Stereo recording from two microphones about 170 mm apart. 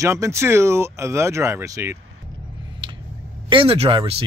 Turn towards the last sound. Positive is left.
turn(degrees=-35)  # may be behind; listen again after turning